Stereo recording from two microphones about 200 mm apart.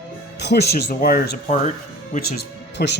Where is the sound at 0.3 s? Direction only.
55° left (ahead or behind).